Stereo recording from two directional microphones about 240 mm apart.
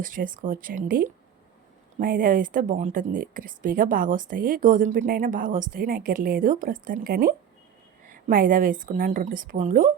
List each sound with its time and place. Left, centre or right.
0.0 s a woman's voice: right